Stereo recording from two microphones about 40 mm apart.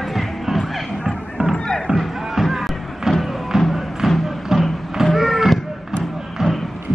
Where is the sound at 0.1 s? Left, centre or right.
Centre.